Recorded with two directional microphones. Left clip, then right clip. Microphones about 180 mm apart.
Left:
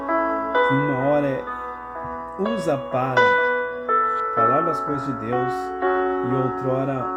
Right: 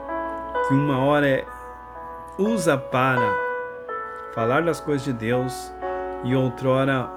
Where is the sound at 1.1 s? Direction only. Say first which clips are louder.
Right 2 dB; 40° right (ahead or behind).